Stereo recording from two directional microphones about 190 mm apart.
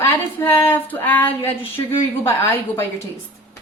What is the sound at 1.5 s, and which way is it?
Speech, 10° left (ahead or behind).